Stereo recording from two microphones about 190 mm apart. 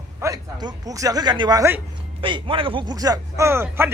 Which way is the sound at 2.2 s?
25° right (ahead or behind).